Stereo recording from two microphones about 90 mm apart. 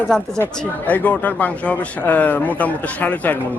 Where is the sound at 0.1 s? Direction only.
5° left (ahead or behind).